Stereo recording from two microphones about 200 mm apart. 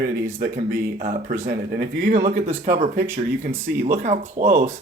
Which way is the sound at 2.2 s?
30° right (ahead or behind).